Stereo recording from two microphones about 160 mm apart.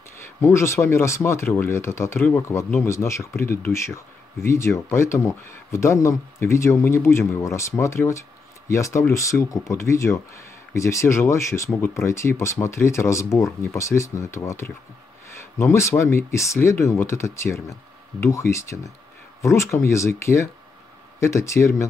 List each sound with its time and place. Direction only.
0.4 s speech: 15° left (ahead or behind)